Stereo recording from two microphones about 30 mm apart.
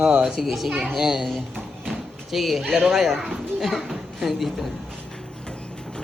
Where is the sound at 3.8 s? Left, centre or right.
Centre.